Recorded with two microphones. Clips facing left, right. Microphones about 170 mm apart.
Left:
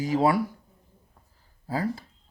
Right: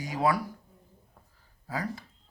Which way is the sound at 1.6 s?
30° left (ahead or behind).